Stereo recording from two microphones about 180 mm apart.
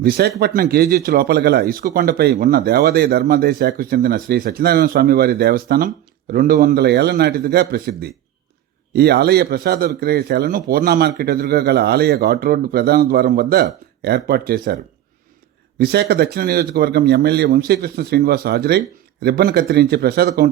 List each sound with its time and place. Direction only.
0.0 s speech: 60° right (ahead or behind)
15.8 s speech: 65° right (ahead or behind)